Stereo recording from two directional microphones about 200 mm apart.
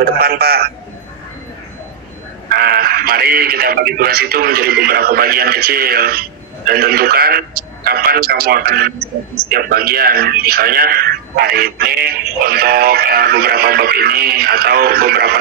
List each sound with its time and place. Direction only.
0.0 s speech: 50° right (ahead or behind)
2.5 s speech: 50° right (ahead or behind)